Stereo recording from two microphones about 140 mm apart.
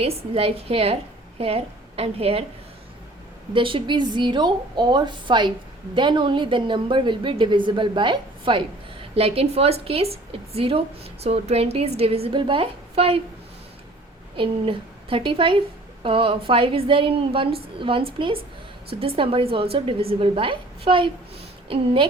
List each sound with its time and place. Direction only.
0.0 s a woman's voice: 45° right (ahead or behind)
3.5 s a woman's voice: 35° right (ahead or behind)
14.3 s a woman's voice: 40° right (ahead or behind)